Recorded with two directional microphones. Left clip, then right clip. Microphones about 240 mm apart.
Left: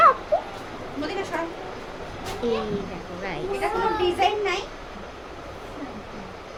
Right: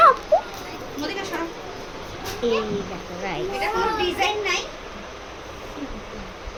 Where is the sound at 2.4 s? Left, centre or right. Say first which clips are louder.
Right 3 dB; centre.